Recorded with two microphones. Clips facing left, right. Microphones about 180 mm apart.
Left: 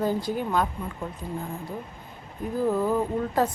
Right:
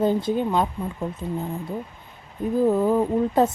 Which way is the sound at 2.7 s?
20° right (ahead or behind).